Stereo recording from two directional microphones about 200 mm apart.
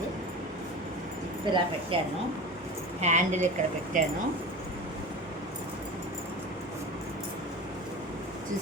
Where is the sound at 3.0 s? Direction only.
35° right (ahead or behind).